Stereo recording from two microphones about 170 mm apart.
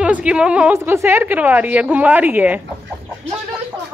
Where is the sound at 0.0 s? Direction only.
5° right (ahead or behind).